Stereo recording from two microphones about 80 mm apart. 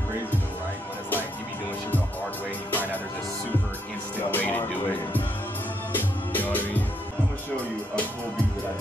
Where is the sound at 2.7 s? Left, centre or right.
Left.